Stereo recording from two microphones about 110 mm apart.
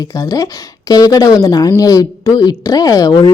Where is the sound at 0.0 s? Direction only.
30° left (ahead or behind).